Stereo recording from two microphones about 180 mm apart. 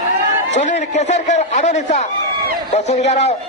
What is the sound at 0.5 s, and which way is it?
A man's voice, 40° left (ahead or behind).